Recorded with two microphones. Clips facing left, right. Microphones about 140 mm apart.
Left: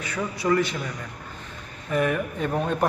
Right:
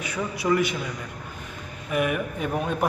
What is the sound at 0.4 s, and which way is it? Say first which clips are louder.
Speech: even; 10° right (ahead or behind).